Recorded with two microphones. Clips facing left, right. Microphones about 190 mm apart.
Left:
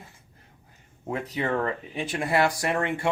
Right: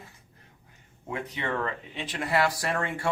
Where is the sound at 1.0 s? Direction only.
35° left (ahead or behind).